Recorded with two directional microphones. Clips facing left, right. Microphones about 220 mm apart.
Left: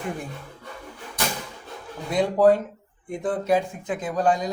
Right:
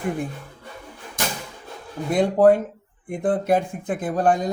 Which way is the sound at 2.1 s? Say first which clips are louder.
Right 2 dB; 50° right (ahead or behind).